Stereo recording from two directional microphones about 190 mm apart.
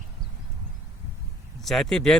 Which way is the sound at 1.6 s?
Centre (ahead or behind).